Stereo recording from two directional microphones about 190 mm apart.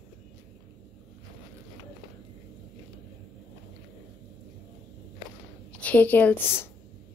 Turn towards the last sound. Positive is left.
turn(degrees=10)  # may be behind; listen again after turning